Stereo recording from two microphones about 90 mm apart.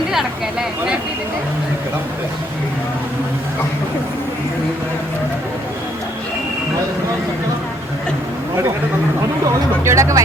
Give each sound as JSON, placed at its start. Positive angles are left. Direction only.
{"t": 9.8, "sound": "speech", "side_deg": -35}